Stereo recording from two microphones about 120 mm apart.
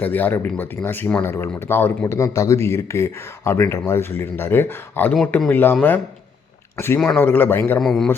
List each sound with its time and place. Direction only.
0.0 s speech: 15° left (ahead or behind)
6.7 s speech: 20° left (ahead or behind)
7.8 s a man's voice: centre (ahead or behind)